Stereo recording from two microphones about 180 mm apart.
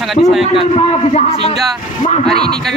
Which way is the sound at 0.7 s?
35° left (ahead or behind).